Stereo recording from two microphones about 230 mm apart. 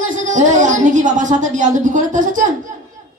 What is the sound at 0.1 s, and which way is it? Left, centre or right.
A woman's voice, right.